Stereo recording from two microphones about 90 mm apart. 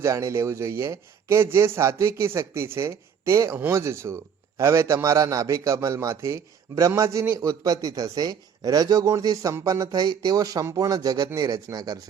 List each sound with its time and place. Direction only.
0.0 s a man's voice: 35° right (ahead or behind)